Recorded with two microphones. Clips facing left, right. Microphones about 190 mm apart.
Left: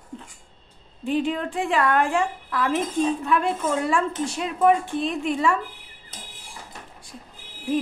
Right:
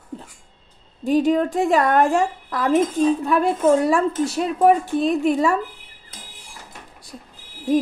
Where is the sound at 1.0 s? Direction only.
40° right (ahead or behind).